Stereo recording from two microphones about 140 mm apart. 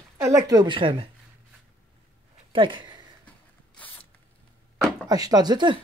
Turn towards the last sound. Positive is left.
turn(degrees=-30)  # may be behind; listen again after turning